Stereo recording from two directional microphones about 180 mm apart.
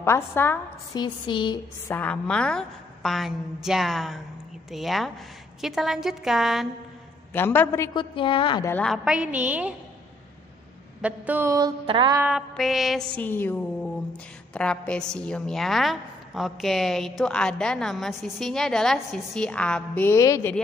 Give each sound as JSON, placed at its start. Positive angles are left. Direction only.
{"t": 0.0, "sound": "a woman's voice", "side_deg": 15}
{"t": 0.9, "sound": "a woman's voice", "side_deg": 25}
{"t": 2.0, "sound": "a woman's voice", "side_deg": 5}
{"t": 7.3, "sound": "a woman's voice", "side_deg": 10}
{"t": 7.9, "sound": "a woman's voice", "side_deg": 25}
{"t": 8.6, "sound": "a woman's voice", "side_deg": 5}
{"t": 11.0, "sound": "a sound", "side_deg": -10}
{"t": 11.8, "sound": "mantra", "side_deg": -30}
{"t": 12.2, "sound": "a woman's voice", "side_deg": -5}